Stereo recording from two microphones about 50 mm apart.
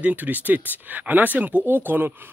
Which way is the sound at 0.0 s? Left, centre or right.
Right.